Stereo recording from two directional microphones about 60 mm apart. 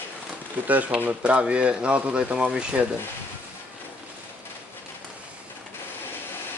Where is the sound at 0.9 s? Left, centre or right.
Right.